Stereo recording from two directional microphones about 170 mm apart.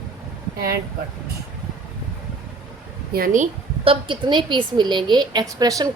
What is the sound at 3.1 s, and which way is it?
Speech, 60° right (ahead or behind).